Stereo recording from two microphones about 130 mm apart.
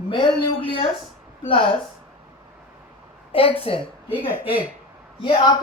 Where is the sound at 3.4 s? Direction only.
45° left (ahead or behind).